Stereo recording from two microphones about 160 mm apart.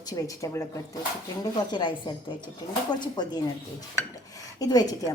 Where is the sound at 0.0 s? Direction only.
20° left (ahead or behind).